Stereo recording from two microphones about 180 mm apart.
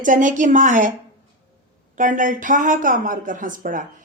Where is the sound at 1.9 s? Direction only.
45° right (ahead or behind).